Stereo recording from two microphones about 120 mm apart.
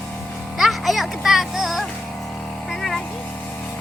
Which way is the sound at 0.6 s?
Centre (ahead or behind).